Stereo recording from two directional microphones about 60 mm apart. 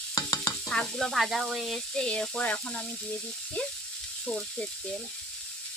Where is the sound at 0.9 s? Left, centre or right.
Centre.